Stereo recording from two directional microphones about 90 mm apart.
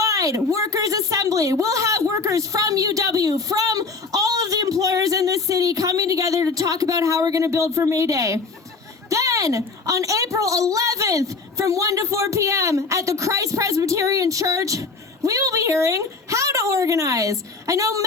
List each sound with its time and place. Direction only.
0.0 s a child's voice: 35° right (ahead or behind)